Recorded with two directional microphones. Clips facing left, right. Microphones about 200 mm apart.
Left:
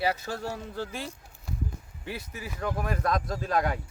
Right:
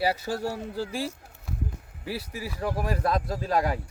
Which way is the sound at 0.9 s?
5° right (ahead or behind).